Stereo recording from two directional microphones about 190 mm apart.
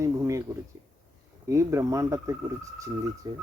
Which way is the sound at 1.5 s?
15° right (ahead or behind).